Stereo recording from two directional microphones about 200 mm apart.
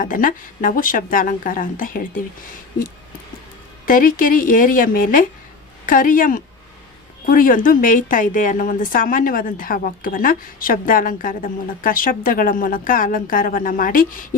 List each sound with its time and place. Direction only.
0.0 s a woman's voice: 45° left (ahead or behind)
3.8 s a woman's voice: 45° left (ahead or behind)